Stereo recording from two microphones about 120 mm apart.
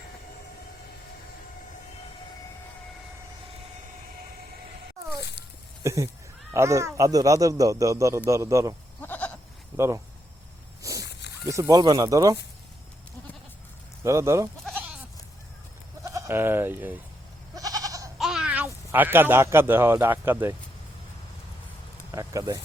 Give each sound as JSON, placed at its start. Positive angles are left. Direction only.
{"t": 5.8, "sound": "speech", "side_deg": -25}
{"t": 9.0, "sound": "goat", "side_deg": 15}
{"t": 9.7, "sound": "speech", "side_deg": -25}
{"t": 10.8, "sound": "a sound", "side_deg": -25}
{"t": 11.4, "sound": "speech", "side_deg": -25}
{"t": 11.8, "sound": "speech", "side_deg": -35}
{"t": 14.0, "sound": "speech", "side_deg": -25}
{"t": 14.6, "sound": "goat", "side_deg": 5}
{"t": 16.0, "sound": "speech", "side_deg": -25}
{"t": 17.5, "sound": "goat", "side_deg": -30}
{"t": 18.2, "sound": "speech", "side_deg": -5}
{"t": 22.1, "sound": "speech", "side_deg": -30}